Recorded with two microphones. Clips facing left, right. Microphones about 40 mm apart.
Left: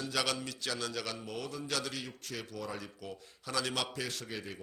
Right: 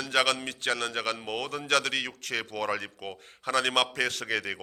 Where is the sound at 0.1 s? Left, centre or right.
Right.